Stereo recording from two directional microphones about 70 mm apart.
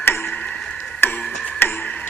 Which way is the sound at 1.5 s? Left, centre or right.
Left.